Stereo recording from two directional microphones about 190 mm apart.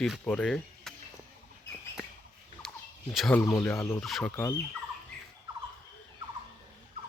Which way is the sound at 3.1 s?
Centre (ahead or behind).